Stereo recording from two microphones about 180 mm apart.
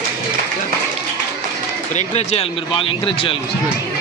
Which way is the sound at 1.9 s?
40° left (ahead or behind).